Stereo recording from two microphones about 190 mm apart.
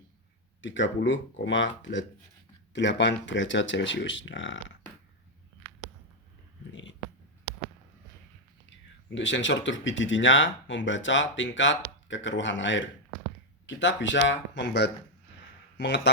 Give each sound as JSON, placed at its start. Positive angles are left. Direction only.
{"t": 0.6, "sound": "speech", "side_deg": 75}
{"t": 9.0, "sound": "speech", "side_deg": 75}